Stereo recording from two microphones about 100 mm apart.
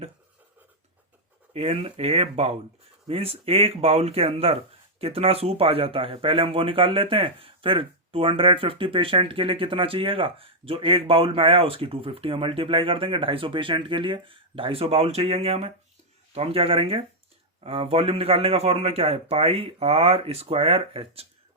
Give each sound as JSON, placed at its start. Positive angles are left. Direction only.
{"t": 1.5, "sound": "a man's voice", "side_deg": -85}